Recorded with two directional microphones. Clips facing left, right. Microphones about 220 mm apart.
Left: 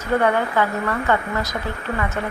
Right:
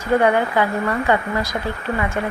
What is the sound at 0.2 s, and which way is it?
Speech, 15° right (ahead or behind).